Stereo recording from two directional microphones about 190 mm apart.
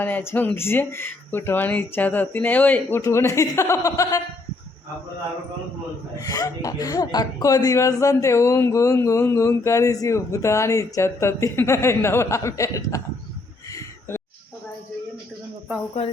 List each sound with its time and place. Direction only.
0.0 s speech: 10° left (ahead or behind)
6.1 s speech: 20° left (ahead or behind)